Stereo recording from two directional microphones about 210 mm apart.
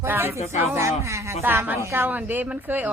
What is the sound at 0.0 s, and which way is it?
Speech, 10° right (ahead or behind).